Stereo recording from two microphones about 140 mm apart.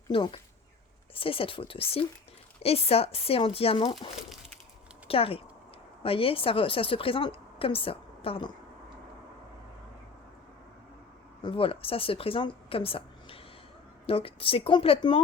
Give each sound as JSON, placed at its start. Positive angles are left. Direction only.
{"t": 0.1, "sound": "a woman's voice", "side_deg": 40}
{"t": 5.0, "sound": "a woman's voice", "side_deg": 40}
{"t": 11.4, "sound": "a woman's voice", "side_deg": 40}